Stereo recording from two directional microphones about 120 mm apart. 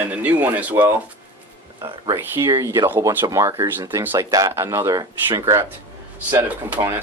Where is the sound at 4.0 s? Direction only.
15° right (ahead or behind).